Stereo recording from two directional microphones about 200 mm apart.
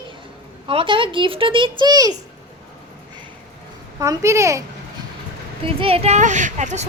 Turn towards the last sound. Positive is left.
turn(degrees=-35)  # may be behind; listen again after turning